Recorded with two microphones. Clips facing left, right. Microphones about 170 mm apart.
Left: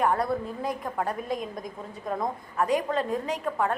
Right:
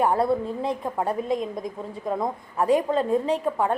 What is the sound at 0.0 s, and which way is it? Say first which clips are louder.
A woman's voice: right 4 dB; 25° right (ahead or behind).